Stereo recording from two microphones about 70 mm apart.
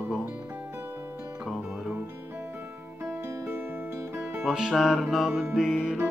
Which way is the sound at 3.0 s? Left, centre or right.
Right.